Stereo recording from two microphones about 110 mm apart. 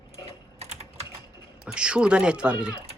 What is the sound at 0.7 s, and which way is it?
Typing, 75° right (ahead or behind).